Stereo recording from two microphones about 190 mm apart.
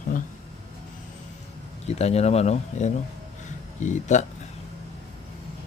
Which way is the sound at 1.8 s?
35° left (ahead or behind).